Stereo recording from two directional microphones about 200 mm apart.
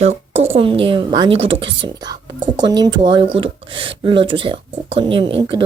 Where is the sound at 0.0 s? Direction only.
30° right (ahead or behind).